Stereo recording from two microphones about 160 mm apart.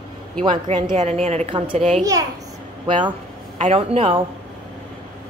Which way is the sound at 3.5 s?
40° right (ahead or behind).